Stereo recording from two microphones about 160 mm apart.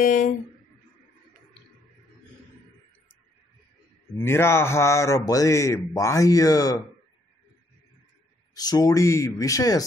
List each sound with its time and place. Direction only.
0.0 s speech: 55° left (ahead or behind)
4.1 s a man's voice: 15° left (ahead or behind)
8.5 s speech: 25° left (ahead or behind)